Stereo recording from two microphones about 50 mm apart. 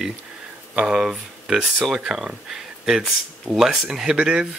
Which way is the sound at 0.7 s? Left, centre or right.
Centre.